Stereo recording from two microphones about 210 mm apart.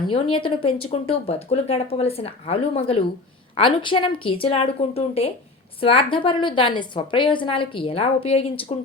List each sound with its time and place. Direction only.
0.1 s a woman's voice: 25° left (ahead or behind)